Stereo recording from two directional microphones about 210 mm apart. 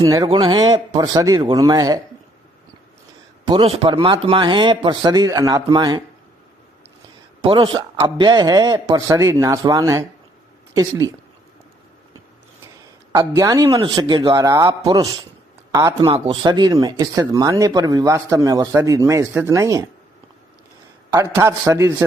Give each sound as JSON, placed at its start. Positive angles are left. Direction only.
{"t": 0.0, "sound": "a man's voice", "side_deg": -20}
{"t": 3.4, "sound": "a man's voice", "side_deg": -25}
{"t": 7.4, "sound": "speech", "side_deg": -25}
{"t": 13.1, "sound": "speech", "side_deg": -15}
{"t": 21.1, "sound": "speech", "side_deg": -15}